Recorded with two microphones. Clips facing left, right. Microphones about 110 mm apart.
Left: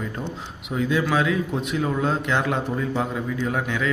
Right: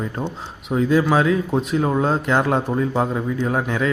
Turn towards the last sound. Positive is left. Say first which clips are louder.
# right 4 dB
turn(degrees=-40)  # may be behind; listen again after turning